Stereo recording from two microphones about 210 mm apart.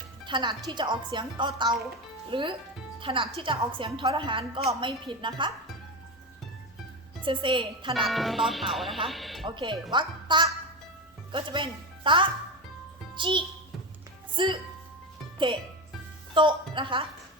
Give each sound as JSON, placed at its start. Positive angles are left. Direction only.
{"t": 0.3, "sound": "a woman's voice", "side_deg": -20}
{"t": 7.2, "sound": "a woman's voice", "side_deg": -25}
{"t": 8.0, "sound": "speech", "side_deg": 0}
{"t": 9.0, "sound": "music", "side_deg": 0}
{"t": 9.5, "sound": "a woman's voice", "side_deg": -20}
{"t": 16.3, "sound": "a woman's voice", "side_deg": -25}